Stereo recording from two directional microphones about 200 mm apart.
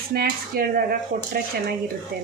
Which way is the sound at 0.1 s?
50° right (ahead or behind).